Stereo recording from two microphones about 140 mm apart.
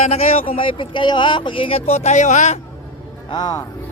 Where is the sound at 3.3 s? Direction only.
30° left (ahead or behind).